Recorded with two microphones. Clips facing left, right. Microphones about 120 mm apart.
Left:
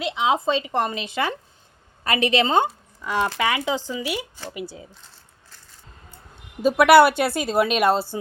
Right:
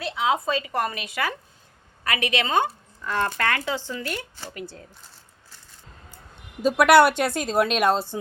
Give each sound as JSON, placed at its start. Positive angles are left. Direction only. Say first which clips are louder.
{"t": 0.0, "sound": "a woman's voice", "louder": "left 2 dB", "side_deg": 20}
{"t": 6.6, "sound": "speech", "louder": "left 2 dB", "side_deg": 0}